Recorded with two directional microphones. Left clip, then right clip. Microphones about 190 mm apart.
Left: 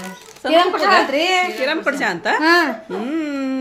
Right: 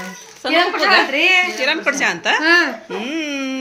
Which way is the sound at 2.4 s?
75° left (ahead or behind).